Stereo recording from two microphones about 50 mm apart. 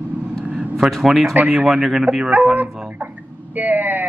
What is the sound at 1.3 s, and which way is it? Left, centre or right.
Speech, right.